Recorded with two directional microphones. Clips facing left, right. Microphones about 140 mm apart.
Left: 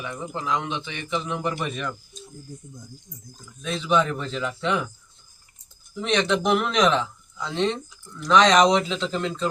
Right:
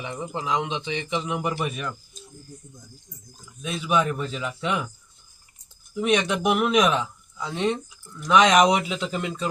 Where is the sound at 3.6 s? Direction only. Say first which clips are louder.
Left 1 dB; 10° right (ahead or behind).